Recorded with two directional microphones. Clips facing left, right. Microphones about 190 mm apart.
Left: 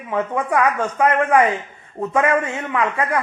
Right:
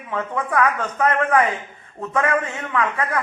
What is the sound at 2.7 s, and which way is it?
Speech, 20° left (ahead or behind).